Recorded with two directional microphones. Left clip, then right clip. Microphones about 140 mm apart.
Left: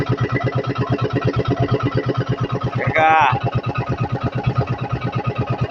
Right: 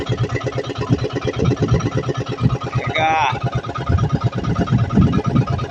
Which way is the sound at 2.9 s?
25° right (ahead or behind).